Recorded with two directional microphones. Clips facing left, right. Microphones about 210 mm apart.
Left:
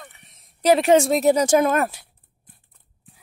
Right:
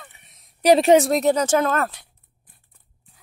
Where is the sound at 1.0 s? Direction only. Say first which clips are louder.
Left 1 dB; centre (ahead or behind).